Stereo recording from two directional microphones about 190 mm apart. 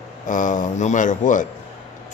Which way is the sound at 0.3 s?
40° left (ahead or behind).